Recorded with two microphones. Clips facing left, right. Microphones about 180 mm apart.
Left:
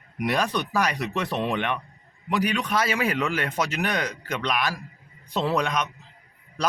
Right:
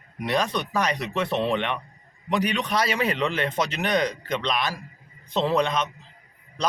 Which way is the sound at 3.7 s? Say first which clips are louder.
Right 2 dB; 30° right (ahead or behind).